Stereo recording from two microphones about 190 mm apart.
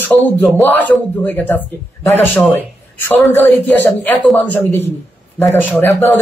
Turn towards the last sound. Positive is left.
turn(degrees=10)  # may be behind; listen again after turning